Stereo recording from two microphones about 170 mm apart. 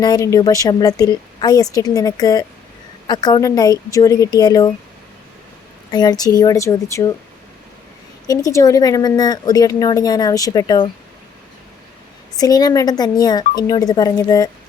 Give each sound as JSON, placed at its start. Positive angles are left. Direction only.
{"t": 0.0, "sound": "a woman's voice", "side_deg": 20}
{"t": 5.9, "sound": "a woman's voice", "side_deg": 25}
{"t": 8.3, "sound": "a woman's voice", "side_deg": 20}
{"t": 12.4, "sound": "a woman's voice", "side_deg": 25}